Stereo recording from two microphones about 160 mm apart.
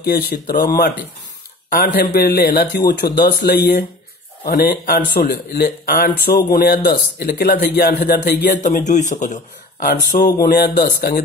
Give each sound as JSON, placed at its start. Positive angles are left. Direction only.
{"t": 0.0, "sound": "a man's voice", "side_deg": 75}
{"t": 4.5, "sound": "a man's voice", "side_deg": 60}
{"t": 10.1, "sound": "a man's voice", "side_deg": 70}